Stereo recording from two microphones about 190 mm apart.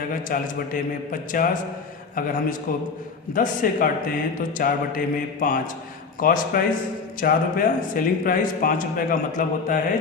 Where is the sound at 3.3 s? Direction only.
45° left (ahead or behind).